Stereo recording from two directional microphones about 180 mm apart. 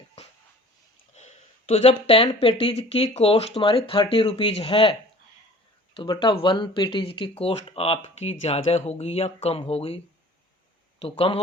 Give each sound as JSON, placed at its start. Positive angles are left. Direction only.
{"t": 1.1, "sound": "speech", "side_deg": 40}
{"t": 11.0, "sound": "speech", "side_deg": 30}